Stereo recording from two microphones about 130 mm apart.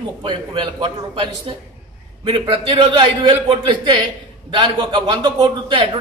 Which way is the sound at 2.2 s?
45° right (ahead or behind).